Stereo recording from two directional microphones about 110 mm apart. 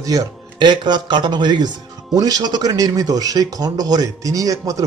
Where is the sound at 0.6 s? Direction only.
45° right (ahead or behind).